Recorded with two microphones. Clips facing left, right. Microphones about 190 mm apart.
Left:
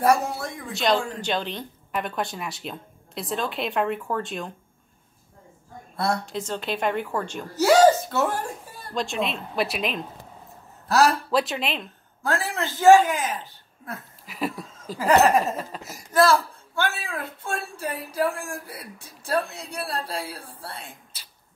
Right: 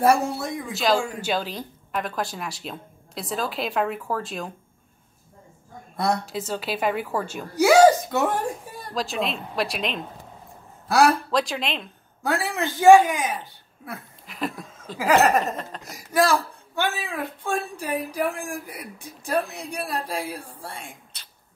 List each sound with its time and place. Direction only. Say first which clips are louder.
0.0 s speech: right 1 dB; 25° right (ahead or behind)
0.7 s a woman's voice: even; 5° right (ahead or behind)
6.2 s a woman's voice: right 1 dB; 5° right (ahead or behind)
8.9 s a woman's voice: even; centre (ahead or behind)
11.2 s a woman's voice: left 1 dB; centre (ahead or behind)
12.5 s a woman's voice: right 2 dB; 15° right (ahead or behind)
14.2 s a sound: left 1 dB; 5° left (ahead or behind)
15.0 s a woman's voice: left 1 dB; centre (ahead or behind)
16.1 s a woman's voice: left 2 dB; 15° right (ahead or behind)
21.1 s a sound: even; 5° left (ahead or behind)